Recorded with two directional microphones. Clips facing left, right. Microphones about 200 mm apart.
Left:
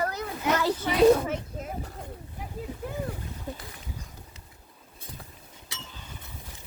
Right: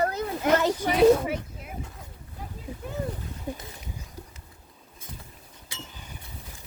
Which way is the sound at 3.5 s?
10° right (ahead or behind).